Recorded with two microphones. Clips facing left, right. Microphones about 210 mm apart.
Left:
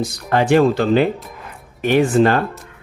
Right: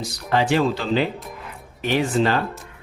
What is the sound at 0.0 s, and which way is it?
Speech, 50° left (ahead or behind).